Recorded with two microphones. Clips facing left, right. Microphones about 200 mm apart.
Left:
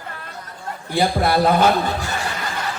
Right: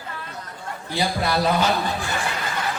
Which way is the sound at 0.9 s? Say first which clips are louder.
Left 5 dB; 55° left (ahead or behind).